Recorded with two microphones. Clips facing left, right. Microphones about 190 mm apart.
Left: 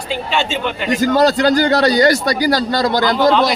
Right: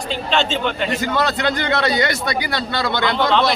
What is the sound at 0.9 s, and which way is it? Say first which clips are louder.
A man's voice: left 7 dB; 40° left (ahead or behind).